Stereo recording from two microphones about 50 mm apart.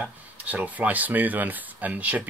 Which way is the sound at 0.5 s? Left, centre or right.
Right.